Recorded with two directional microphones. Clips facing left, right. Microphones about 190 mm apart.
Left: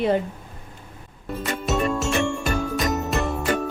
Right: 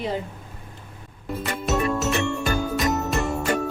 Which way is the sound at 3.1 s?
Centre (ahead or behind).